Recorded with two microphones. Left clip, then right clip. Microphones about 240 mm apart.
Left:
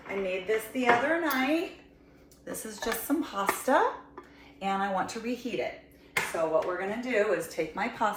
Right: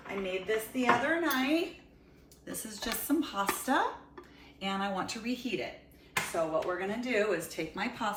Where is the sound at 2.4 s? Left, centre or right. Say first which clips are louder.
Left 4 dB; centre.